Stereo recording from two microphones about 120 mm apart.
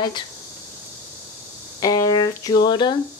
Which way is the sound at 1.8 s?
30° left (ahead or behind).